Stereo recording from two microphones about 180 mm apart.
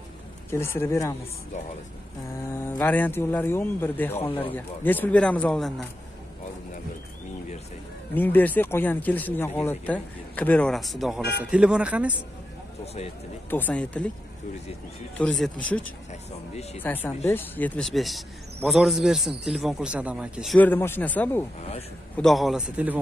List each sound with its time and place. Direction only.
0.5 s a man's voice: 15° left (ahead or behind)
2.5 s a man's voice: 10° left (ahead or behind)
8.2 s a man's voice: 10° left (ahead or behind); by 12.1 s 5° right (ahead or behind)
13.5 s a man's voice: 10° left (ahead or behind)
15.1 s a man's voice: 5° left (ahead or behind)
16.1 s speech: 40° left (ahead or behind)
16.8 s a man's voice: 10° left (ahead or behind); by 20.5 s 5° right (ahead or behind)
20.5 s a man's voice: 10° left (ahead or behind); by 22.9 s 5° right (ahead or behind)